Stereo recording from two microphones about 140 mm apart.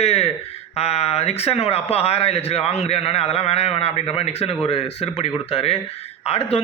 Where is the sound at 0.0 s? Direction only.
45° left (ahead or behind).